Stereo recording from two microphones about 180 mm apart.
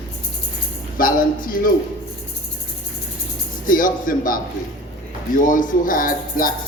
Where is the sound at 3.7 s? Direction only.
50° left (ahead or behind).